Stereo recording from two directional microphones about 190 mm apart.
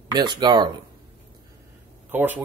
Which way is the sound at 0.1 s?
25° right (ahead or behind).